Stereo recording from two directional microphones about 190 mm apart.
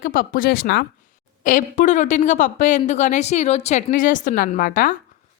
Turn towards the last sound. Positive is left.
turn(degrees=45)  # may be behind; listen again after turning